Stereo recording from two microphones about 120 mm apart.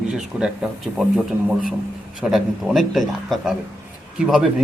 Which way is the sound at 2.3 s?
Centre (ahead or behind).